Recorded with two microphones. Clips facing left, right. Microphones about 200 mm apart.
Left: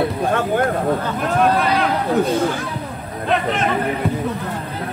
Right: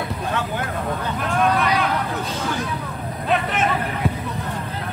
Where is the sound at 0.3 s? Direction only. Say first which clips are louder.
Left 6 dB; 50° left (ahead or behind).